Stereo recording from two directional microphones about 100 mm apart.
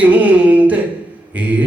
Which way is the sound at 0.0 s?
15° right (ahead or behind).